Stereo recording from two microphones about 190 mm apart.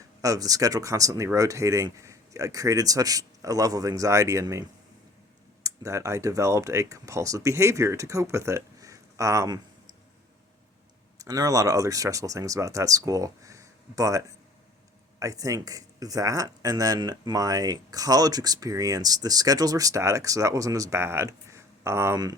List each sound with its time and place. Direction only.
0.2 s speech: 20° right (ahead or behind)
5.6 s speech: 15° right (ahead or behind)
11.2 s speech: 20° right (ahead or behind)